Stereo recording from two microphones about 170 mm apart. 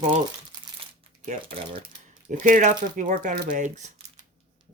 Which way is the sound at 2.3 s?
55° right (ahead or behind).